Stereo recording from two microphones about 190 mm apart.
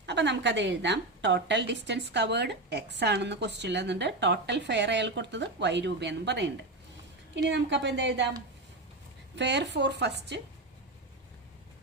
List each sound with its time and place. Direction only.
0.0 s a woman's voice: 65° right (ahead or behind)
7.5 s speech: 65° right (ahead or behind)
9.3 s a woman's voice: 65° right (ahead or behind)